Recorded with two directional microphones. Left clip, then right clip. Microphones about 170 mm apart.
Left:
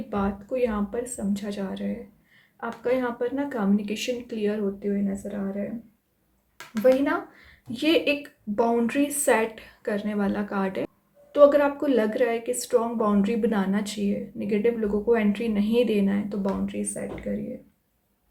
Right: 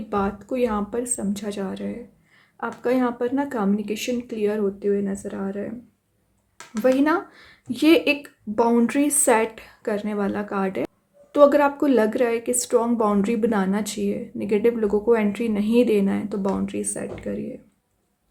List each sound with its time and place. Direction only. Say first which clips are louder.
0.1 s speech: right 3 dB; 45° right (ahead or behind)
4.8 s speech: right 6 dB; 50° right (ahead or behind)
7.0 s speech: right 5 dB; 45° right (ahead or behind); by 10.8 s 30° right (ahead or behind)
11.3 s speech: right 2 dB; 40° right (ahead or behind)